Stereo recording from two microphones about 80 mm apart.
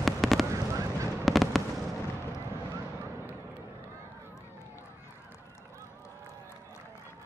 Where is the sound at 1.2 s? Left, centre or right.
Centre.